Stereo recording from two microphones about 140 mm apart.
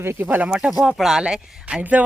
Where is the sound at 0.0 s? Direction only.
15° right (ahead or behind).